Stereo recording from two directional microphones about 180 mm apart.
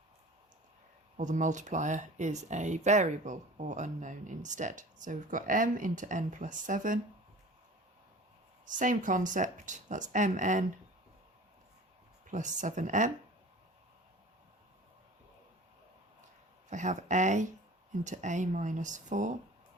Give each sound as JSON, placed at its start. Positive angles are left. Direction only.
{"t": 1.1, "sound": "speech", "side_deg": -45}
{"t": 8.6, "sound": "speech", "side_deg": -45}
{"t": 12.3, "sound": "speech", "side_deg": -45}
{"t": 16.6, "sound": "speech", "side_deg": -45}